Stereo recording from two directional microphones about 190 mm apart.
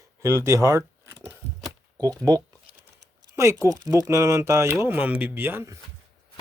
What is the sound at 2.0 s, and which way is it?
Speech, 20° right (ahead or behind).